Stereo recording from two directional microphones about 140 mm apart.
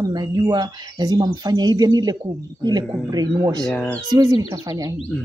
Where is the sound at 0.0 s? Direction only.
30° right (ahead or behind).